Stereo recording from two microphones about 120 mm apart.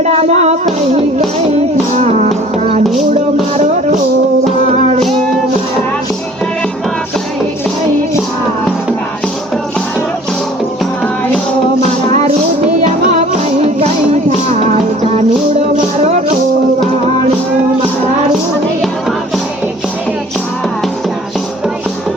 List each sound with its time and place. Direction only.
0.0 s music: 65° right (ahead or behind)
2.0 s music: 70° right (ahead or behind)
4.7 s music: 65° right (ahead or behind)
13.1 s music: 70° right (ahead or behind)